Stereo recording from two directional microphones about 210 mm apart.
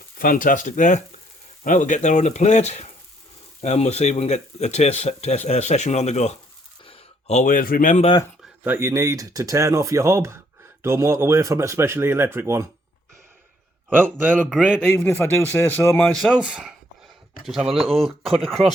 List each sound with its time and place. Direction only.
0.2 s speech: 40° left (ahead or behind)
8.6 s speech: 10° right (ahead or behind)
13.9 s a man's voice: 10° right (ahead or behind)
14.9 s a man's voice: 10° left (ahead or behind)